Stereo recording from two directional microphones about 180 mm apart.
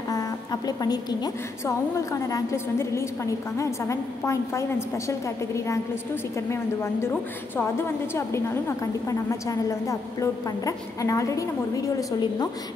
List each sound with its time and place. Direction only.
0.1 s a woman's voice: 20° left (ahead or behind)